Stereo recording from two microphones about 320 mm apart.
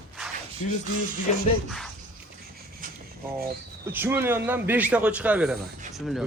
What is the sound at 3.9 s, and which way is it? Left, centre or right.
Speech, centre.